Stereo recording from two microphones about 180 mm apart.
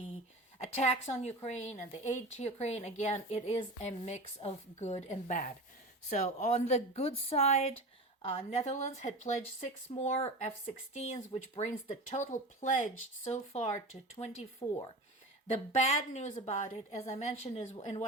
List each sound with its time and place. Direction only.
0.6 s a woman's voice: 35° left (ahead or behind)
11.9 s a woman's voice: 45° left (ahead or behind)
16.0 s a woman's voice: 40° left (ahead or behind)